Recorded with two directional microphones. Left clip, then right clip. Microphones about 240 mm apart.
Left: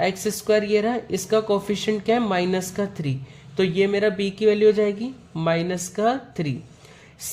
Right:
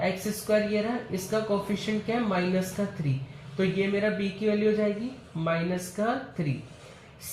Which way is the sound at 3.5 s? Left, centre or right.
Left.